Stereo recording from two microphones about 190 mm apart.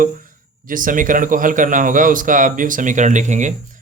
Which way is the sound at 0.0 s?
45° right (ahead or behind).